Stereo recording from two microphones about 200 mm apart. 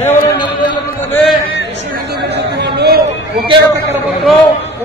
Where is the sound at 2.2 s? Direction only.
55° right (ahead or behind).